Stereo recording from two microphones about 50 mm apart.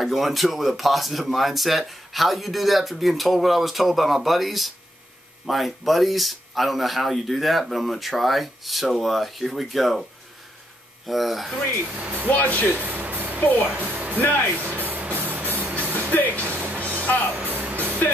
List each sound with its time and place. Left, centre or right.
0.0 s speech: centre
11.1 s speech: centre
12.0 s speech: right
12.3 s speech: left
12.8 s vehicle: right
13.4 s speech: left
13.7 s music: right
14.2 s speech: left
14.5 s music: right